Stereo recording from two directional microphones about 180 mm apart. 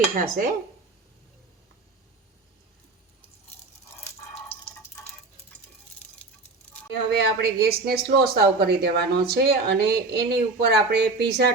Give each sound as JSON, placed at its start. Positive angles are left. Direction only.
{"t": 0.2, "sound": "dishes", "side_deg": -50}
{"t": 6.9, "sound": "a woman's voice", "side_deg": -65}